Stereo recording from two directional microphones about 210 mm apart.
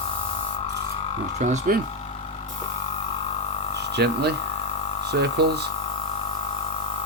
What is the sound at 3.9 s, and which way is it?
Speech, 50° right (ahead or behind).